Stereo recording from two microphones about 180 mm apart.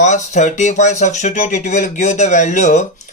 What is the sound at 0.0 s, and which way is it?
Speech, 40° left (ahead or behind).